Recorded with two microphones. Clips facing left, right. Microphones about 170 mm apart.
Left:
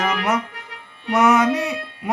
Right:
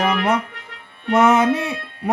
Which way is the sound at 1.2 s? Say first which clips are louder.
Right 1 dB; 25° right (ahead or behind).